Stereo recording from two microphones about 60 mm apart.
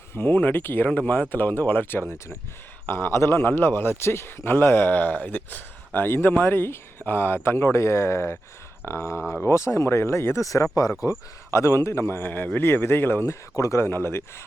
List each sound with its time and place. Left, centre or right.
0.1 s a man's voice: left
11.1 s speech: left
12.0 s a man's voice: left
13.2 s speech: left
13.8 s speech: left